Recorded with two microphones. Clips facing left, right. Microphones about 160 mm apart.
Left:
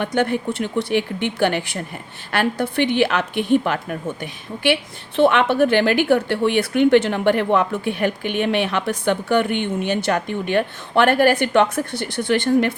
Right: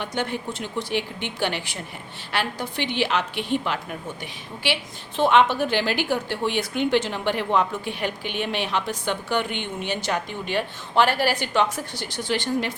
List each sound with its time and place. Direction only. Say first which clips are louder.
0.0 s a woman's voice: left 7 dB; 55° left (ahead or behind)